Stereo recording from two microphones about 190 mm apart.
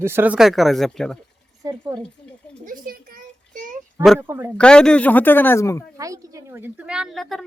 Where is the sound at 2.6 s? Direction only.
50° right (ahead or behind).